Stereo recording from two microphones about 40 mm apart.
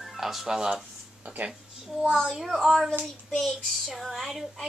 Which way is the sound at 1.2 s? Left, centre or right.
Right.